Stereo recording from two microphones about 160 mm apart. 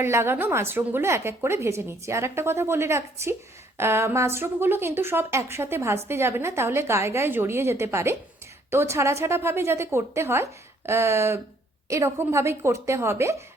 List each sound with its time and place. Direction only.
0.0 s a woman's voice: 15° right (ahead or behind)